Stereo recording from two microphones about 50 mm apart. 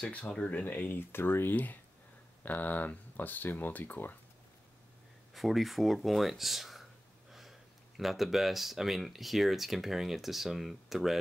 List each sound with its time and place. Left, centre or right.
0.1 s speech: left
2.4 s speech: left
5.3 s speech: centre
8.0 s speech: centre